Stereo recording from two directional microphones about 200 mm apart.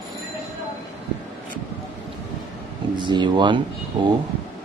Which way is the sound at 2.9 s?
25° right (ahead or behind).